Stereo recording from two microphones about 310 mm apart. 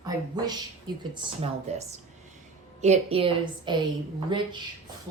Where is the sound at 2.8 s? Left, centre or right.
Centre.